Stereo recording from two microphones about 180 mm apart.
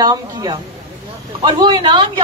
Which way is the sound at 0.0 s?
20° right (ahead or behind).